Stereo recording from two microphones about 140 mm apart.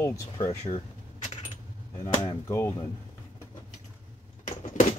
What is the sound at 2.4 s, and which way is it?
Speech, 15° left (ahead or behind).